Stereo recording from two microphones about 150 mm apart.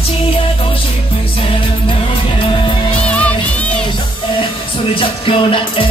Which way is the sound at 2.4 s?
35° left (ahead or behind).